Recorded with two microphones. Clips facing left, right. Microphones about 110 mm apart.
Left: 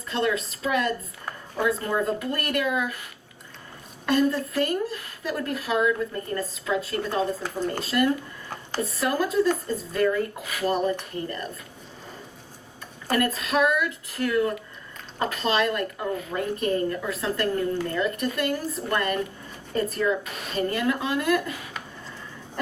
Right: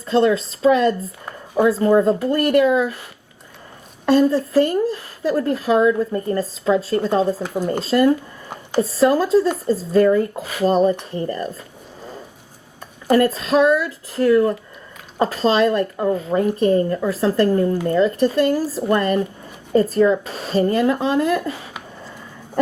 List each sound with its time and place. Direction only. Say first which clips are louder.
0.0 s speech: right 9 dB; 30° right (ahead or behind)
4.0 s speech: right 7 dB; 30° right (ahead or behind)
7.4 s speech: right 6 dB; 20° right (ahead or behind)
13.1 s speech: right 9 dB; 30° right (ahead or behind)